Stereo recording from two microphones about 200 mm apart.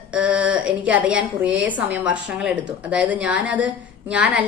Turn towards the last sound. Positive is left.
turn(degrees=-5)  # may be behind; listen again after turning